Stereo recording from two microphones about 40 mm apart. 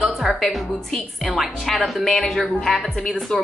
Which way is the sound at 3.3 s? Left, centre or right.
Left.